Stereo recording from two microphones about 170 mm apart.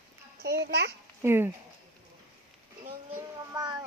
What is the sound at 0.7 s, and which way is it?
Speech, 75° right (ahead or behind).